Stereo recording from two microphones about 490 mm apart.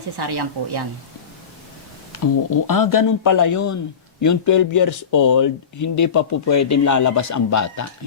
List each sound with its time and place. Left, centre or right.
0.2 s a woman's voice: right
2.2 s speech: left